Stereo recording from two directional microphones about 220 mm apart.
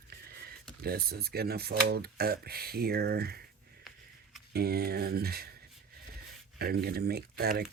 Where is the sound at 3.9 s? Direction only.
Centre (ahead or behind).